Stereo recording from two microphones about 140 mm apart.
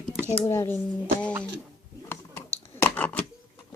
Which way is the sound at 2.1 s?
15° left (ahead or behind).